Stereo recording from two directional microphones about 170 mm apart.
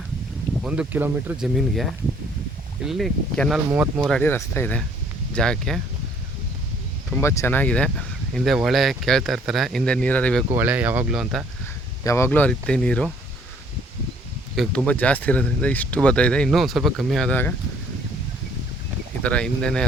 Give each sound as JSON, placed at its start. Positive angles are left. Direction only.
{"t": 0.6, "sound": "speech", "side_deg": -5}
{"t": 3.7, "sound": "speech", "side_deg": -15}
{"t": 4.2, "sound": "speech", "side_deg": 15}
{"t": 7.2, "sound": "speech", "side_deg": 15}
{"t": 10.5, "sound": "speech", "side_deg": -10}
{"t": 12.0, "sound": "speech", "side_deg": 15}
{"t": 14.5, "sound": "speech", "side_deg": 0}
{"t": 19.2, "sound": "speech", "side_deg": 5}